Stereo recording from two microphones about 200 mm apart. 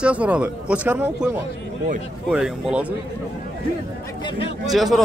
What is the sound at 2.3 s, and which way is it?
Speech, 5° right (ahead or behind).